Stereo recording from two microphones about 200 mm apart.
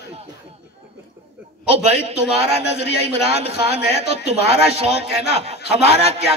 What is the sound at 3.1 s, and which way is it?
A man's voice, 30° right (ahead or behind).